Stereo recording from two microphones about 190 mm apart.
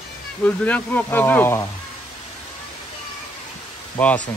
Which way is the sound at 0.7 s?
10° left (ahead or behind).